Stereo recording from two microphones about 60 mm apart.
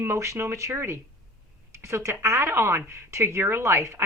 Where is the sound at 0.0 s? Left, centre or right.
Right.